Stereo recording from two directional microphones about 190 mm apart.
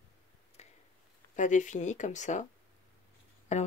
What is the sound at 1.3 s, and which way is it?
Speech, 40° left (ahead or behind).